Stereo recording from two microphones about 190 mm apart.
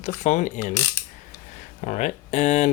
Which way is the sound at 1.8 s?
35° left (ahead or behind).